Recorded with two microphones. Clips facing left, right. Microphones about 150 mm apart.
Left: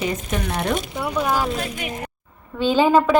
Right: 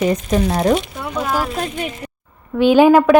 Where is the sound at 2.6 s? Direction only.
15° right (ahead or behind).